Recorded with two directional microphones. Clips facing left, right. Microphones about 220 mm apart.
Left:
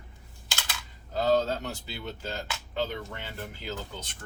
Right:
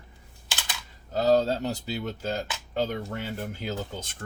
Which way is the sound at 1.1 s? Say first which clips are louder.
Right 3 dB; 40° right (ahead or behind).